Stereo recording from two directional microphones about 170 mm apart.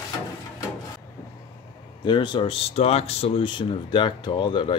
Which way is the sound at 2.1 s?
30° left (ahead or behind).